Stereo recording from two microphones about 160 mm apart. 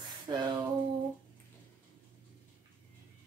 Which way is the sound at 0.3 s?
25° right (ahead or behind).